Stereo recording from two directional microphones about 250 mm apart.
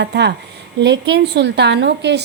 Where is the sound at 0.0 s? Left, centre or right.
Right.